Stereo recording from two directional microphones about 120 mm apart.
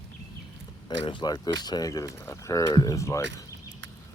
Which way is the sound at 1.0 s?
40° left (ahead or behind).